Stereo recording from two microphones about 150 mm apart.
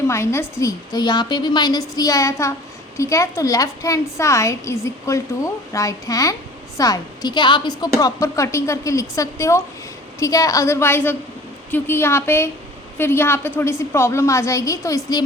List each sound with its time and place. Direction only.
0.1 s a woman's voice: 20° left (ahead or behind)